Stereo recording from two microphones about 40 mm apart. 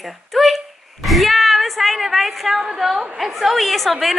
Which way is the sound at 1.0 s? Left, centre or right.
Centre.